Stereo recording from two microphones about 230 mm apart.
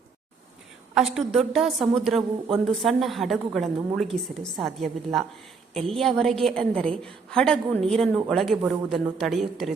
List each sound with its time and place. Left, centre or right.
0.9 s a woman's voice: centre